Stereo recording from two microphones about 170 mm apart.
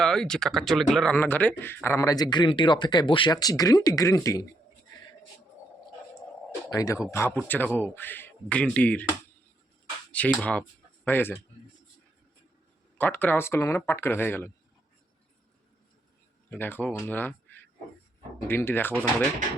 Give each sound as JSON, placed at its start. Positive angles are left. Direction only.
{"t": 0.0, "sound": "speech", "side_deg": 5}
{"t": 6.7, "sound": "speech", "side_deg": 20}
{"t": 10.1, "sound": "a sound", "side_deg": 10}
{"t": 11.0, "sound": "speech", "side_deg": 10}
{"t": 13.0, "sound": "speech", "side_deg": 10}
{"t": 16.5, "sound": "speech", "side_deg": 10}